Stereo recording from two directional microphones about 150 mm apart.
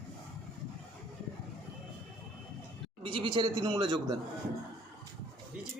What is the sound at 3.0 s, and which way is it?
Speech, 35° right (ahead or behind).